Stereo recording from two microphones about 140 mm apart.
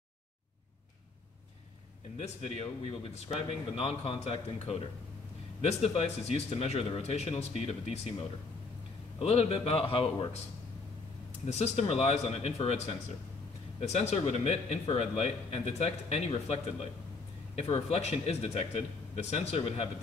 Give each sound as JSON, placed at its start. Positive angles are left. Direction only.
{"t": 2.1, "sound": "speech", "side_deg": 50}
{"t": 9.2, "sound": "speech", "side_deg": 45}
{"t": 11.4, "sound": "speech", "side_deg": 50}
{"t": 13.7, "sound": "speech", "side_deg": 50}
{"t": 17.6, "sound": "speech", "side_deg": 50}